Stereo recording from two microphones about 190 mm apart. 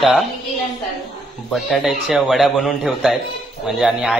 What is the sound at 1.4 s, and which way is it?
A man's voice, centre (ahead or behind).